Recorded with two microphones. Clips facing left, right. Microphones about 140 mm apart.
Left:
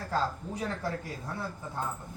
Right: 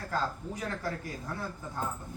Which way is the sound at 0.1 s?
30° left (ahead or behind).